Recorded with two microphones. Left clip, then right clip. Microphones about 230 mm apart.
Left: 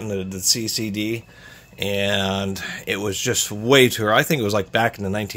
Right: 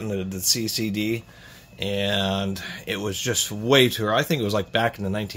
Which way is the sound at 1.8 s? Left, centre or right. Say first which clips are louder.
Left 3 dB; left.